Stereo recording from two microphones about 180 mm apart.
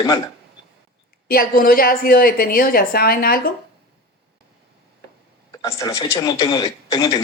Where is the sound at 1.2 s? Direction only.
55° left (ahead or behind).